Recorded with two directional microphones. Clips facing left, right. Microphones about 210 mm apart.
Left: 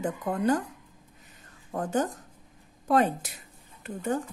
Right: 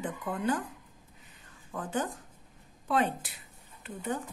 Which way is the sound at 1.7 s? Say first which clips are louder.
Left 5 dB; 45° left (ahead or behind).